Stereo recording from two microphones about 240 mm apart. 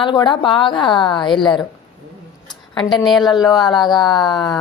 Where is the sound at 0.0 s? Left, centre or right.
Centre.